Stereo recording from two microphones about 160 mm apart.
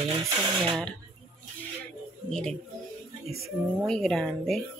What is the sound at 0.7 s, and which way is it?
Speech, centre (ahead or behind).